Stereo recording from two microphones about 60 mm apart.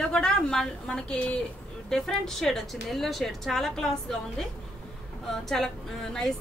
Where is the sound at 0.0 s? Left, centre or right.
Centre.